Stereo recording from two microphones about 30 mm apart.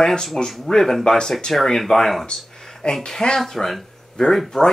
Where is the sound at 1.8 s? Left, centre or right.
Centre.